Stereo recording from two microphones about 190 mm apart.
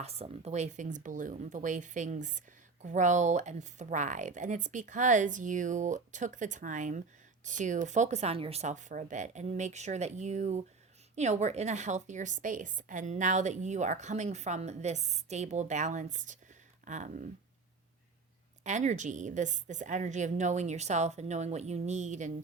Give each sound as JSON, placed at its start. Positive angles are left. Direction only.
{"t": 0.0, "sound": "a woman's voice", "side_deg": -35}
{"t": 18.6, "sound": "a woman's voice", "side_deg": -40}